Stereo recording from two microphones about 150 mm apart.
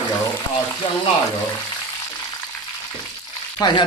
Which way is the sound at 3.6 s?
30° left (ahead or behind).